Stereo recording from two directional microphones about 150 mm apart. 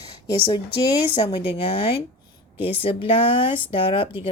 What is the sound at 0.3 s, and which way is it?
Speech, 35° left (ahead or behind).